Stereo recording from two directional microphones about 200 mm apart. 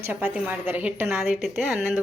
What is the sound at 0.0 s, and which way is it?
A woman's voice, 10° right (ahead or behind).